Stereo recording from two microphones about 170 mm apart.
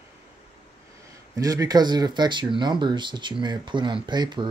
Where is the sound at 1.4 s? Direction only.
20° right (ahead or behind).